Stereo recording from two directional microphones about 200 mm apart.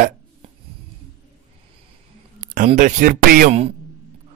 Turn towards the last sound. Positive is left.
turn(degrees=-45)  # may be behind; listen again after turning